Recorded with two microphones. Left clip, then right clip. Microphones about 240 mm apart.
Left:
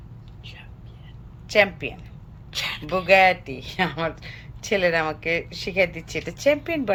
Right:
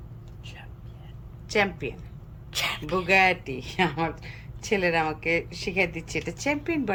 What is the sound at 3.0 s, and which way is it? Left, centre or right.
Speech, centre.